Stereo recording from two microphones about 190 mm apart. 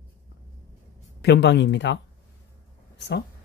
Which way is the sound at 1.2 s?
65° left (ahead or behind).